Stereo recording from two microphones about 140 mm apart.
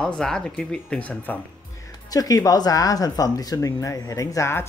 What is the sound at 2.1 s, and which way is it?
Speech, 25° left (ahead or behind).